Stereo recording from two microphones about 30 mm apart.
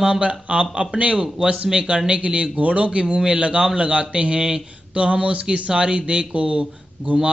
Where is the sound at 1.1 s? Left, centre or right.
Centre.